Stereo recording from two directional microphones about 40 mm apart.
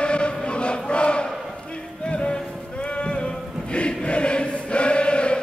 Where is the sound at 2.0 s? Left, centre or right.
Left.